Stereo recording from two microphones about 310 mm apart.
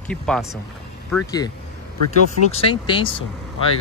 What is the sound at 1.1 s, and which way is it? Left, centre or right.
Speech, centre.